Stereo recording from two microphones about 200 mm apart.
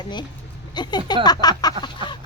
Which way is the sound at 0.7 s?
20° left (ahead or behind).